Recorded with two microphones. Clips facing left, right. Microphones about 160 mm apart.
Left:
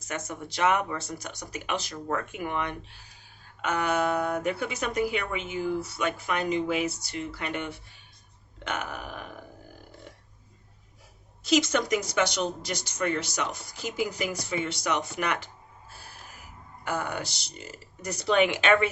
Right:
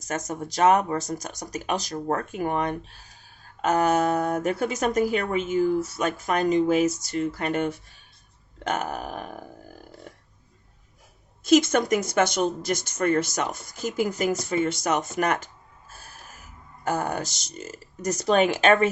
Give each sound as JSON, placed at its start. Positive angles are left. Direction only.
{"t": 0.3, "sound": "speech", "side_deg": -40}
{"t": 10.1, "sound": "a sound", "side_deg": -45}
{"t": 11.4, "sound": "speech", "side_deg": -50}
{"t": 15.9, "sound": "snort", "side_deg": -45}
{"t": 16.8, "sound": "speech", "side_deg": -40}